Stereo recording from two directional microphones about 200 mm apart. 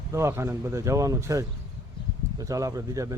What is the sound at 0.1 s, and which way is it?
Speech, 15° right (ahead or behind).